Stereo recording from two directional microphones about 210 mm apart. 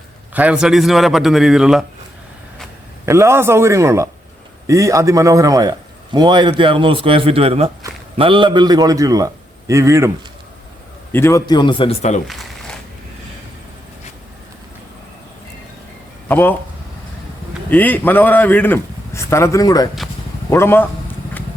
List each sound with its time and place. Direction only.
0.3 s a man's voice: 5° right (ahead or behind)
3.1 s a man's voice: 10° right (ahead or behind)
11.1 s a man's voice: 15° left (ahead or behind); by 12.2 s 30° left (ahead or behind)
12.3 s a sound: centre (ahead or behind)
16.3 s a man's voice: 10° left (ahead or behind)
17.7 s a man's voice: 10° left (ahead or behind)